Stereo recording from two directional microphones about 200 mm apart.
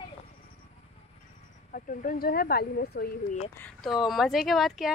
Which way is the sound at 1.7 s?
45° left (ahead or behind).